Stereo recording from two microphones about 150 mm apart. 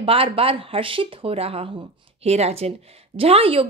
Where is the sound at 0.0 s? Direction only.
40° right (ahead or behind).